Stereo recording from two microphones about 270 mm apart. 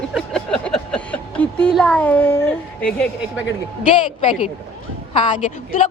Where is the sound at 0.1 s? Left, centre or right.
Centre.